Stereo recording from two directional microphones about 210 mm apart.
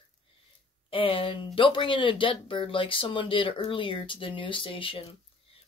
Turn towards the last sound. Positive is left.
turn(degrees=25)  # may be behind; listen again after turning